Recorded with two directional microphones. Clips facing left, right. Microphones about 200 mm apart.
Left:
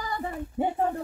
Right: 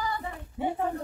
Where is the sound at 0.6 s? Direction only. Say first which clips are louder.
Left 3 dB; 45° left (ahead or behind).